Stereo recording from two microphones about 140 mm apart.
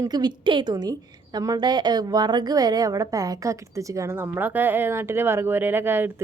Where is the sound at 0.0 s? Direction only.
30° right (ahead or behind).